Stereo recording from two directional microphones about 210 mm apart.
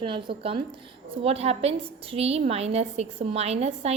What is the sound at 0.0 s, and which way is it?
A woman's voice, 25° right (ahead or behind).